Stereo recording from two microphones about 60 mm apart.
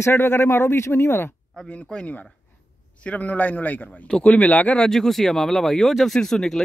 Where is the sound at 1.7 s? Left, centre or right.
Centre.